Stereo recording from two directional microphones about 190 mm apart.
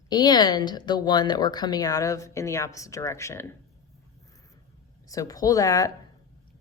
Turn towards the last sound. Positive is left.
turn(degrees=15)  # may be behind; listen again after turning